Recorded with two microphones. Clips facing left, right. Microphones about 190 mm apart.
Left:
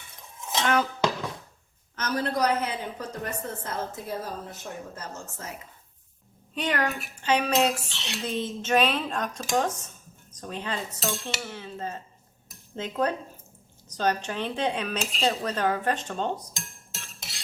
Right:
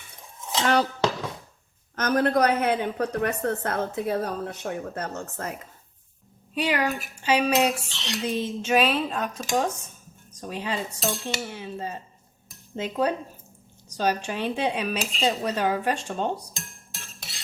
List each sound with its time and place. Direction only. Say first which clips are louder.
0.6 s cutlery: right 2 dB; 35° right (ahead or behind)
2.0 s a woman's voice: right 5 dB; 55° right (ahead or behind)
6.5 s cutlery: right 3 dB; 10° right (ahead or behind)